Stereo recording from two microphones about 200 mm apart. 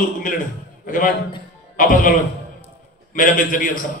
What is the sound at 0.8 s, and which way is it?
A man's voice, 45° left (ahead or behind).